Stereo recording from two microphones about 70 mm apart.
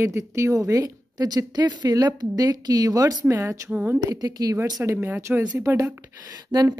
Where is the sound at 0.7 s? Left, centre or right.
Right.